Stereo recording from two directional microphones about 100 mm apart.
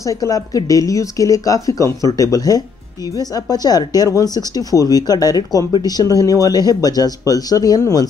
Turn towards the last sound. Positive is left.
turn(degrees=40)  # may be behind; listen again after turning